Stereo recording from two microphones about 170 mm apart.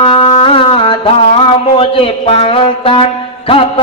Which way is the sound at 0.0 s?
35° left (ahead or behind).